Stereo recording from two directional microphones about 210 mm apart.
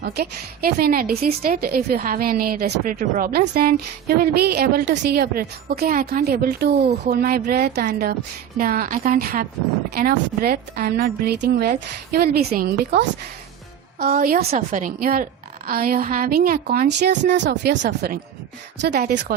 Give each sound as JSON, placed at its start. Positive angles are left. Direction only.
{"t": 0.0, "sound": "a woman's voice", "side_deg": -45}
{"t": 16.9, "sound": "a woman's voice", "side_deg": -55}